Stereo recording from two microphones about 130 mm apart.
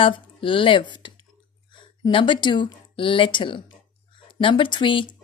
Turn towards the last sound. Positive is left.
turn(degrees=40)  # may be behind; listen again after turning